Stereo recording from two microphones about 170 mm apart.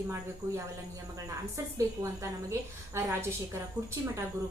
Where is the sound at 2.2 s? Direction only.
15° right (ahead or behind).